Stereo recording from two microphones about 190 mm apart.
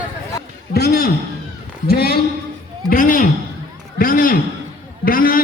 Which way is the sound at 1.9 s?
55° left (ahead or behind).